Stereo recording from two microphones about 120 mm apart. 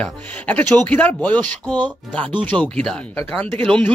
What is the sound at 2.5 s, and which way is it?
Speech, 10° left (ahead or behind).